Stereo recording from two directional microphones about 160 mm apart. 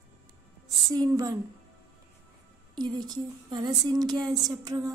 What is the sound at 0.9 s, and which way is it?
Speech, 25° right (ahead or behind).